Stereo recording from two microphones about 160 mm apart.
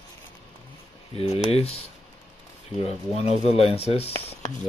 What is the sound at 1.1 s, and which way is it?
Typing, 40° left (ahead or behind).